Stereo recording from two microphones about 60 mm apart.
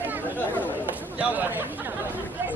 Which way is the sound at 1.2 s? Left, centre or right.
Right.